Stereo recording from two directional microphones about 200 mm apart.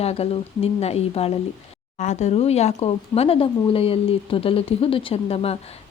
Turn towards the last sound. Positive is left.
turn(degrees=30)  # may be behind; listen again after turning